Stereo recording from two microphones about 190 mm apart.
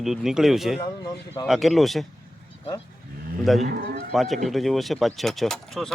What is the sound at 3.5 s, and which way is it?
Speech, centre (ahead or behind).